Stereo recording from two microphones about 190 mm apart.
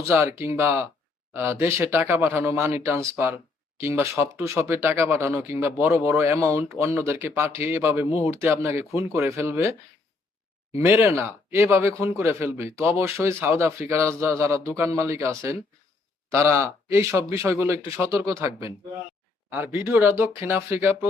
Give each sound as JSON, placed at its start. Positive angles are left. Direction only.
{"t": 0.1, "sound": "speech", "side_deg": -15}
{"t": 10.8, "sound": "speech", "side_deg": -10}